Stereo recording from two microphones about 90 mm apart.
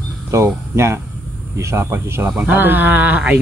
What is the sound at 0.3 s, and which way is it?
Speech, 30° right (ahead or behind).